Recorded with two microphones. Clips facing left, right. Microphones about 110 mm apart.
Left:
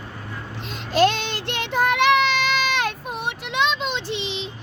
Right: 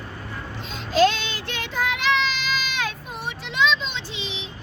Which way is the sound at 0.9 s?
60° left (ahead or behind).